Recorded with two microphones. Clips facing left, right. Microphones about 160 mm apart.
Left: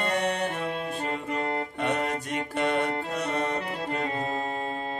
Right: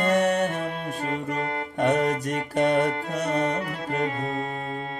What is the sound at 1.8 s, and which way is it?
Mantra, 40° right (ahead or behind).